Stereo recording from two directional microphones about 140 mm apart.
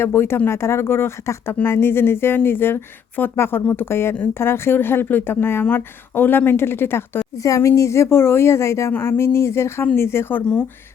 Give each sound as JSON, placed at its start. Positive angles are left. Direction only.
{"t": 0.0, "sound": "speech", "side_deg": 15}